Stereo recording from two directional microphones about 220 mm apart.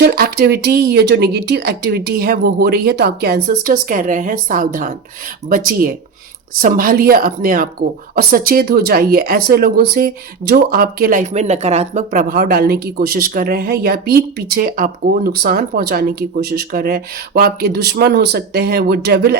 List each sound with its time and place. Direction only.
0.0 s a woman's voice: 45° right (ahead or behind)